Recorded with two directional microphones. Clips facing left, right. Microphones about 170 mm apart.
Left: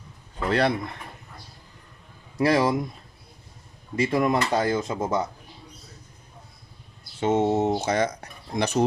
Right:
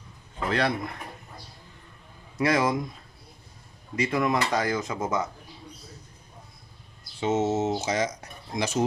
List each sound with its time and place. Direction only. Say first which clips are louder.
0.4 s speech: left 3 dB; 30° left (ahead or behind)
2.4 s speech: left 3 dB; 30° left (ahead or behind)
4.0 s speech: left 3 dB; 30° left (ahead or behind)
7.2 s speech: left 3 dB; 55° left (ahead or behind)